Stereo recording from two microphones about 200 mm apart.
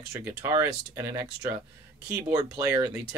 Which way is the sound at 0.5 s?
15° right (ahead or behind).